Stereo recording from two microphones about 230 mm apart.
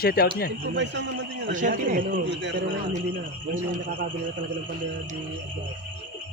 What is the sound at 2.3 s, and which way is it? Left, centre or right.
Speech, right.